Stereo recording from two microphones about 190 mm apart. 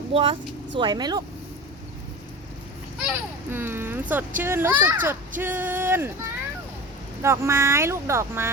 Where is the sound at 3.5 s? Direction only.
10° right (ahead or behind).